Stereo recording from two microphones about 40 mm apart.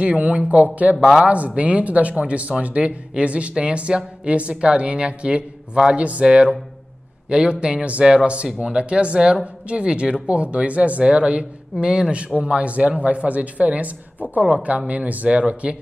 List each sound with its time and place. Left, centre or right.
0.0 s speech: right
11.8 s speech: centre